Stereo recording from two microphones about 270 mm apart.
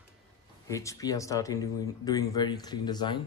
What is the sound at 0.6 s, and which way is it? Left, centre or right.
Speech, centre.